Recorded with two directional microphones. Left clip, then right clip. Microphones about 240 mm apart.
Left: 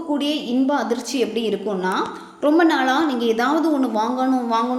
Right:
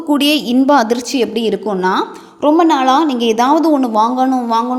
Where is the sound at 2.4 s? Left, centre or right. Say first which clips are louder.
Right 6 dB; right.